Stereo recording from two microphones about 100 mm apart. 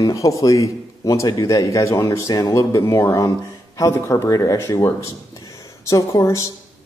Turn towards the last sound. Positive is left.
turn(degrees=30)  # may be behind; listen again after turning